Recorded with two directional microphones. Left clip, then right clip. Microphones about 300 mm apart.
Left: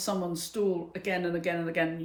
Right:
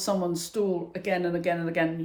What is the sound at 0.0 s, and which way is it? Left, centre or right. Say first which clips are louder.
Speech: right 4 dB; centre.